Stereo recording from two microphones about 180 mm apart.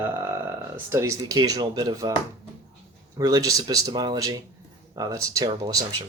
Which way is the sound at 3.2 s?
20° right (ahead or behind).